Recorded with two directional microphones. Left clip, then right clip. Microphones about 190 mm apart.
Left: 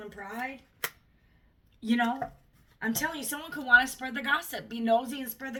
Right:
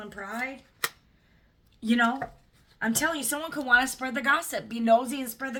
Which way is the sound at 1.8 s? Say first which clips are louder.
Right 4 dB; 30° right (ahead or behind).